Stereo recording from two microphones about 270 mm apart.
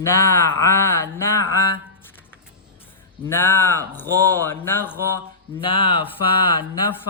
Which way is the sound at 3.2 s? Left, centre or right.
Centre.